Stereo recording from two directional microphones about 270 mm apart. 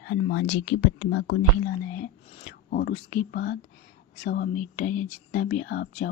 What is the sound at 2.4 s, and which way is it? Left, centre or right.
Speech, left.